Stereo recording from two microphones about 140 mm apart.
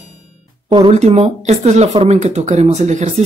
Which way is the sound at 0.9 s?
50° right (ahead or behind).